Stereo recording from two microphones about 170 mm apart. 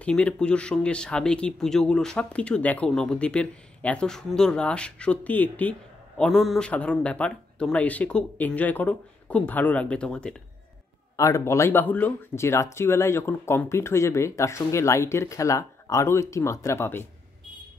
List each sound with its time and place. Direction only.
0.0 s speech: 5° left (ahead or behind)
11.1 s speech: 20° left (ahead or behind)